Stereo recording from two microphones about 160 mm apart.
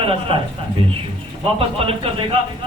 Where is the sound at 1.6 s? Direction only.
35° right (ahead or behind).